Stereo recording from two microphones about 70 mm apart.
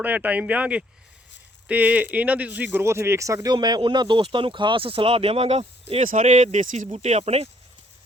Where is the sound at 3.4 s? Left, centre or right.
Right.